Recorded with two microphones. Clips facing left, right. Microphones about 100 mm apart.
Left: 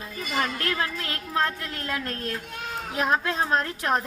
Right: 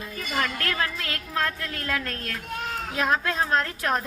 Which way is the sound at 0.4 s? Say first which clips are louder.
Even; 25° left (ahead or behind).